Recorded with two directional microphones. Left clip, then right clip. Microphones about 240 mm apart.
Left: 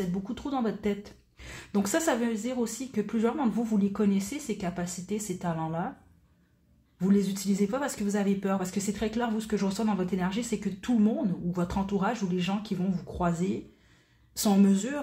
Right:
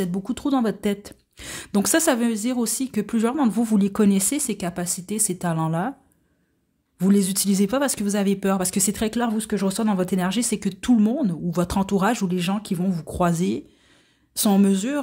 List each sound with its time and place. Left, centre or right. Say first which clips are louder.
0.0 s speech: right 8 dB; right
7.0 s speech: right 6 dB; right